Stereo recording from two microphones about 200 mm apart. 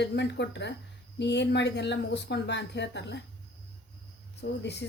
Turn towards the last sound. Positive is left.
turn(degrees=60)  # may be behind; listen again after turning